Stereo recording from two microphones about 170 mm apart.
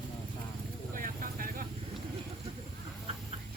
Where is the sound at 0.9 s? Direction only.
55° right (ahead or behind).